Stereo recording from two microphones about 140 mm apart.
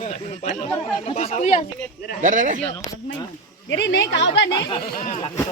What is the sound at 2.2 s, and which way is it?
Speech, 65° right (ahead or behind).